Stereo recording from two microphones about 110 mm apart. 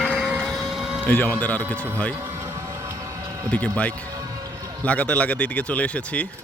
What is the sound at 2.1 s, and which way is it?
Vehicle, 25° right (ahead or behind).